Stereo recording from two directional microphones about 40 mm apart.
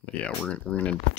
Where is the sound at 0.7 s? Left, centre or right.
Centre.